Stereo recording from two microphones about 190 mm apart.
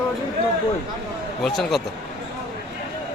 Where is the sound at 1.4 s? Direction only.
Centre (ahead or behind).